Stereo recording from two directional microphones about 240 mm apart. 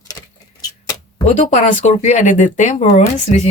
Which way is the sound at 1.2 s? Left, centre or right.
Left.